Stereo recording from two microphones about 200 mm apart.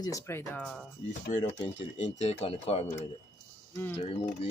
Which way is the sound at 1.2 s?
40° left (ahead or behind).